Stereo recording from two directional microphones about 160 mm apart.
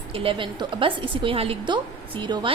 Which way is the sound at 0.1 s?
35° right (ahead or behind).